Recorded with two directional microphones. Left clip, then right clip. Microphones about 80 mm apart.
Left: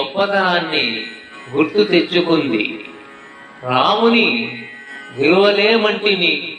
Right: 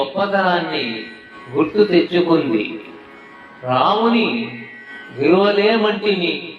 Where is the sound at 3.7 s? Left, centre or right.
Centre.